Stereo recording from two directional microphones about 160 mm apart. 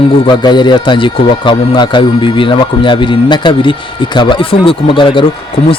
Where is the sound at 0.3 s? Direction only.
30° left (ahead or behind).